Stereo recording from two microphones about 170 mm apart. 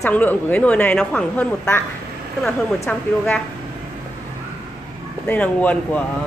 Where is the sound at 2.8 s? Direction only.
10° left (ahead or behind).